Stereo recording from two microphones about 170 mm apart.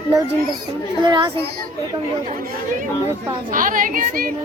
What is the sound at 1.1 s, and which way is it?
Speech, 25° right (ahead or behind).